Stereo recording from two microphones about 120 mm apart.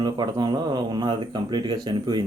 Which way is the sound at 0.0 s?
40° right (ahead or behind).